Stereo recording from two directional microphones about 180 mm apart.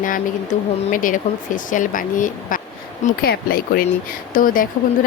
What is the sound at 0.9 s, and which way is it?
Speech, 50° left (ahead or behind).